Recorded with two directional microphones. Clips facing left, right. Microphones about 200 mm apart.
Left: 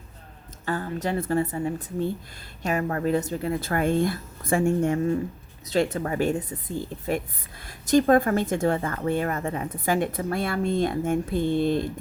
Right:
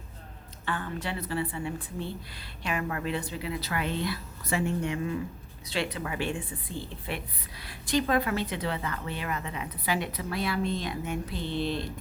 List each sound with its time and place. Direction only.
0.6 s a woman's voice: 40° left (ahead or behind)